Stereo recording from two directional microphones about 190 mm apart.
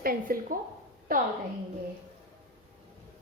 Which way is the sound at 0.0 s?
50° right (ahead or behind).